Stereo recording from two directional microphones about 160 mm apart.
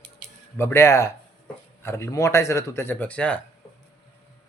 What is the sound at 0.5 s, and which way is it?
Speech, 15° left (ahead or behind).